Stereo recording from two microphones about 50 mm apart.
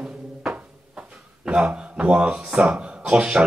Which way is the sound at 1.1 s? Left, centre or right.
Centre.